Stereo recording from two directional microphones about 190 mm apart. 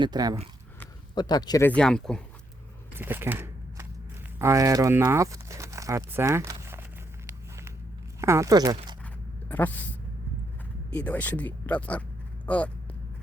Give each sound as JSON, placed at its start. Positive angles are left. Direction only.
{"t": 0.0, "sound": "speech", "side_deg": -20}
{"t": 1.1, "sound": "speech", "side_deg": 20}
{"t": 2.9, "sound": "a sound", "side_deg": -10}
{"t": 4.4, "sound": "speech", "side_deg": -15}
{"t": 8.2, "sound": "speech", "side_deg": -15}
{"t": 9.0, "sound": "zipper", "side_deg": 10}
{"t": 10.9, "sound": "speech", "side_deg": 5}